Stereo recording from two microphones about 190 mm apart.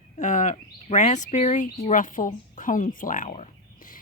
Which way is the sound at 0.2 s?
40° left (ahead or behind).